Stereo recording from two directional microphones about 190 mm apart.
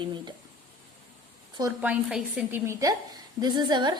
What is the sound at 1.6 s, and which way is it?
A woman's voice, 10° right (ahead or behind).